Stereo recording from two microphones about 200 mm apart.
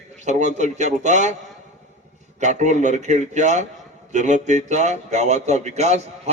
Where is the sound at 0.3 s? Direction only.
35° right (ahead or behind).